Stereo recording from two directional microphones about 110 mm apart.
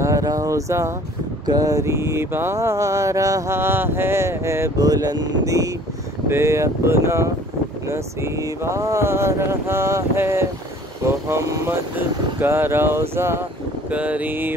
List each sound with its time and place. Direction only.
0.0 s a sound: 30° right (ahead or behind)
1.4 s mantra: 35° right (ahead or behind)
11.1 s speech: 25° right (ahead or behind)
12.4 s mantra: 20° right (ahead or behind)
13.8 s speech: 15° right (ahead or behind)